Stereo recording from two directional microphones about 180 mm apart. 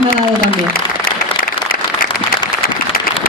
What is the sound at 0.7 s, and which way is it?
Applause, 55° left (ahead or behind).